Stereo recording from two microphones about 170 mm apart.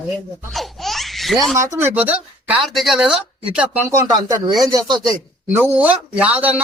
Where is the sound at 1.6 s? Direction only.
15° right (ahead or behind).